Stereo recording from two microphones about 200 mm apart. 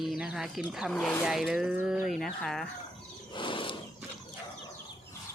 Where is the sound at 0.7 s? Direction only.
Centre (ahead or behind).